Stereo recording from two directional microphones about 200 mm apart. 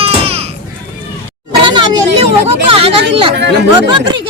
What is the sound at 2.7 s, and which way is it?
Speech, 25° right (ahead or behind).